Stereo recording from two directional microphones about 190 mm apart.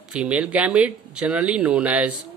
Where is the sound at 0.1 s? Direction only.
5° right (ahead or behind).